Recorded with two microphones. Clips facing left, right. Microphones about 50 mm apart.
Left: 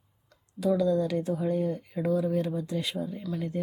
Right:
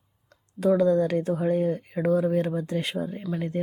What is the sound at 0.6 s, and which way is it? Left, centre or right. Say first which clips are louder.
Speech: right 4 dB; right.